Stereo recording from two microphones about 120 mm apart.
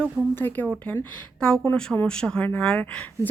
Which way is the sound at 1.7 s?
5° left (ahead or behind).